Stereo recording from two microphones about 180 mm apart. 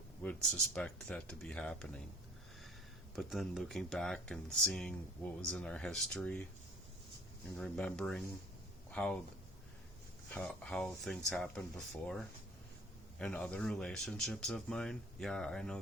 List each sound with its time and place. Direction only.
0.2 s speech: 5° left (ahead or behind)
3.2 s speech: centre (ahead or behind)
7.6 s speech: 5° left (ahead or behind)
10.3 s speech: 5° left (ahead or behind)
13.1 s speech: 5° left (ahead or behind)